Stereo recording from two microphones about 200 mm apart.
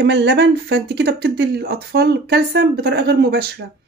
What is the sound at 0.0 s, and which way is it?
Speech, 60° right (ahead or behind).